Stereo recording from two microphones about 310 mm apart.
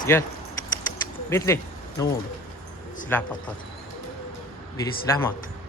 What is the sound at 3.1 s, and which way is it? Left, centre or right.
Speech, centre.